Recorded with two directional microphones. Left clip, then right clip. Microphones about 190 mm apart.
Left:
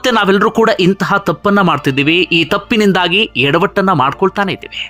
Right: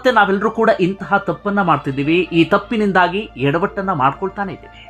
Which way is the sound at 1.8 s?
25° left (ahead or behind).